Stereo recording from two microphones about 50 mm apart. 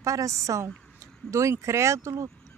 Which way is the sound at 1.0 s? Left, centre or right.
Right.